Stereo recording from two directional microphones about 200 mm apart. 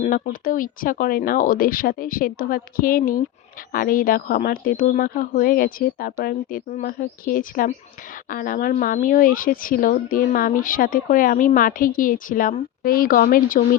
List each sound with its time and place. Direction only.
0.0 s speech: 45° left (ahead or behind)